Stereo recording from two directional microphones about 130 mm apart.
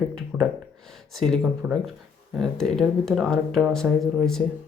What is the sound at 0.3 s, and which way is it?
Speech, 10° right (ahead or behind).